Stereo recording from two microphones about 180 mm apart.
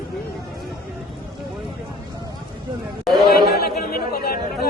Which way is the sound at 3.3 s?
60° left (ahead or behind).